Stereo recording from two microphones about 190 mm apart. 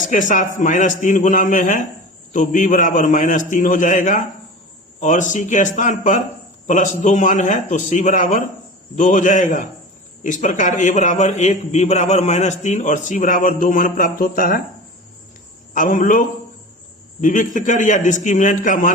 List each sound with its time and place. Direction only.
0.1 s a man's voice: 45° left (ahead or behind)
15.7 s a man's voice: 45° left (ahead or behind)